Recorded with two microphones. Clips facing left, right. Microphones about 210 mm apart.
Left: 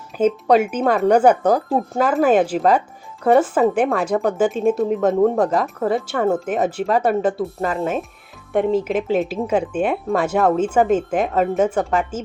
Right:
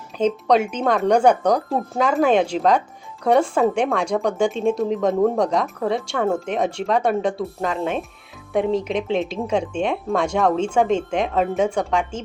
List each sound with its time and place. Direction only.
0.2 s speech: 5° left (ahead or behind)